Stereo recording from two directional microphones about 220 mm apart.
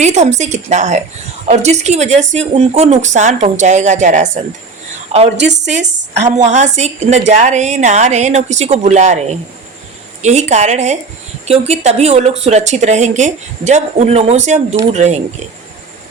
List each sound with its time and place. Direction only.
0.0 s speech: 30° right (ahead or behind)
5.4 s speech: 50° right (ahead or behind)
6.1 s speech: 30° right (ahead or behind)